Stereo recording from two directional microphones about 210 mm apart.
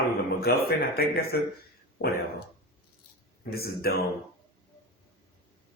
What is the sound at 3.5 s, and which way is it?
Speech, 45° left (ahead or behind).